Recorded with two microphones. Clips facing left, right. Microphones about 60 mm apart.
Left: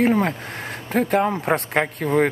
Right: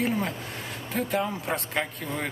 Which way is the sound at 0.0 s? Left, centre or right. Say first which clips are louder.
Left 9 dB; left.